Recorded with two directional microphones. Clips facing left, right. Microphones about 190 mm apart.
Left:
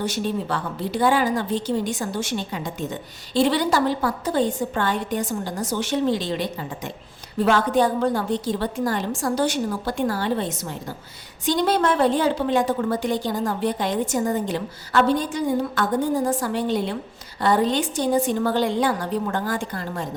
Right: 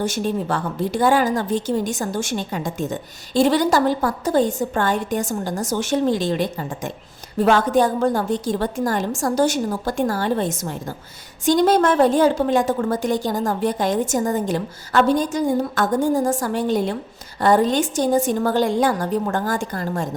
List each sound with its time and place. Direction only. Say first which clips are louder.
0.0 s a woman's voice: right 3 dB; 45° right (ahead or behind)